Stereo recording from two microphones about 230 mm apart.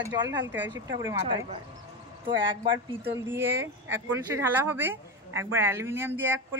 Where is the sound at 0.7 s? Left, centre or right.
Centre.